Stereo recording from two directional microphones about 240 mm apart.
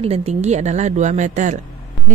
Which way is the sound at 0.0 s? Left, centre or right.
Right.